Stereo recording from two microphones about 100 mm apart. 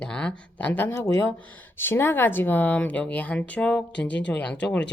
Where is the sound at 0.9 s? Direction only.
35° left (ahead or behind).